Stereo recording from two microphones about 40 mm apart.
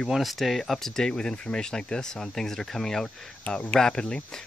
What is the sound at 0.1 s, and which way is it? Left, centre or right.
Speech, centre.